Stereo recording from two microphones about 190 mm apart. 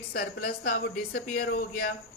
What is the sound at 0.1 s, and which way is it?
Speech, 50° left (ahead or behind).